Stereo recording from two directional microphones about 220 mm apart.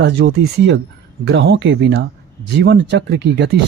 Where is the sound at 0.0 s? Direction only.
50° right (ahead or behind).